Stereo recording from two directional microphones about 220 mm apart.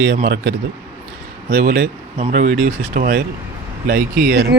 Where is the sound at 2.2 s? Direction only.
35° right (ahead or behind).